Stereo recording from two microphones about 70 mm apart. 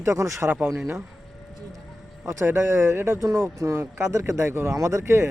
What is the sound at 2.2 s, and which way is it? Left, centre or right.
Speech, right.